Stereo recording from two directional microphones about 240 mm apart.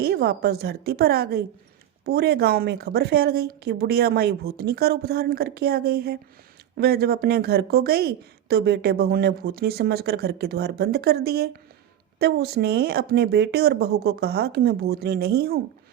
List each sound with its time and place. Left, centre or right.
0.0 s speech: right